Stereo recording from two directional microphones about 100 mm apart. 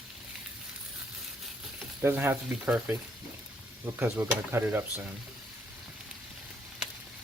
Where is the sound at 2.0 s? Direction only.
25° right (ahead or behind).